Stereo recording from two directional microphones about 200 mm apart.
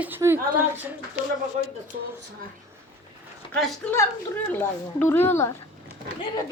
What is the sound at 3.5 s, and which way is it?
Speech, 15° left (ahead or behind).